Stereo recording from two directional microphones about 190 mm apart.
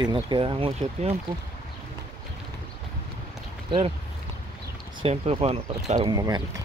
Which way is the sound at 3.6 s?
25° right (ahead or behind).